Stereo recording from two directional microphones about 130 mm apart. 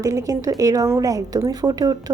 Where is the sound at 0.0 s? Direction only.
25° right (ahead or behind).